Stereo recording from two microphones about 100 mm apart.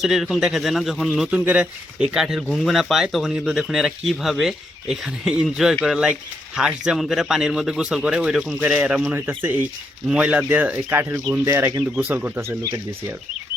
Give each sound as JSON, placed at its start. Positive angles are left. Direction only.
{"t": 0.0, "sound": "speech", "side_deg": 0}
{"t": 1.3, "sound": "speech", "side_deg": -10}